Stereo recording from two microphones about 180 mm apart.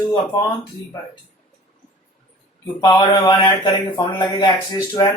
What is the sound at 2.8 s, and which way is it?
Speech, 25° left (ahead or behind).